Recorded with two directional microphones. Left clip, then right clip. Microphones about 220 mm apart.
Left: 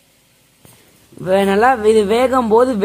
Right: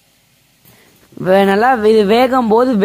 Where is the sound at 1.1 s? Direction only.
25° right (ahead or behind).